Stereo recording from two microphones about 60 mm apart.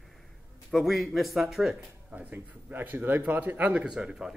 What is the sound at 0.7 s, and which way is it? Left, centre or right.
Speech, centre.